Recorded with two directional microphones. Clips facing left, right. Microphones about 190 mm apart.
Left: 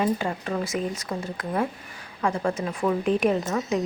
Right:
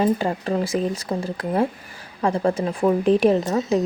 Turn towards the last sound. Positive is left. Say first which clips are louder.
# right 5 dB
turn(degrees=-35)  # may be behind; listen again after turning